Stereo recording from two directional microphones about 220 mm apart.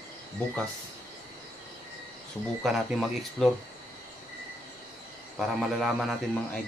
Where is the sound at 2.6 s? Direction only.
Centre (ahead or behind).